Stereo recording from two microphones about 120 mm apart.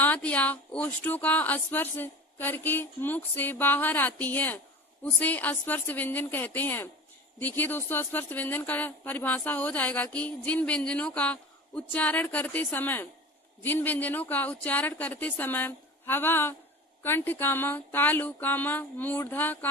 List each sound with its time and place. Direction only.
0.0 s speech: 15° left (ahead or behind)